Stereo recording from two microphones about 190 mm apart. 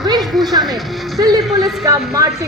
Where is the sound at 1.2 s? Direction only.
20° right (ahead or behind).